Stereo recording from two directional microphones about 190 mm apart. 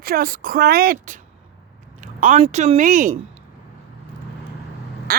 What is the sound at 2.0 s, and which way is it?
Speech, 35° right (ahead or behind).